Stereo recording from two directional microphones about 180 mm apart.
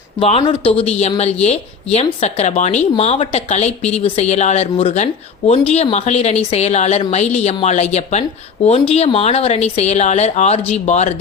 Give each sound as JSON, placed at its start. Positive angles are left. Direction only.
{"t": 0.2, "sound": "speech", "side_deg": 35}